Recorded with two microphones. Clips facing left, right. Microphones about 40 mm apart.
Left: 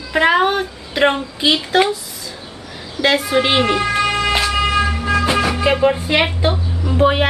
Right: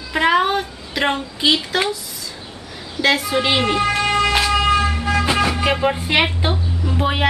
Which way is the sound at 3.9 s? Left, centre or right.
Left.